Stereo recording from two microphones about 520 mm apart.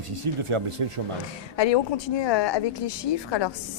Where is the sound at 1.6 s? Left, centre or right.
Left.